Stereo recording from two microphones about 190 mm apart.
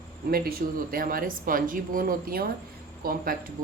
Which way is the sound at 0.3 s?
50° right (ahead or behind).